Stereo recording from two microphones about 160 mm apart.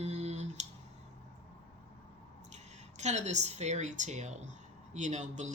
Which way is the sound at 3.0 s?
45° right (ahead or behind).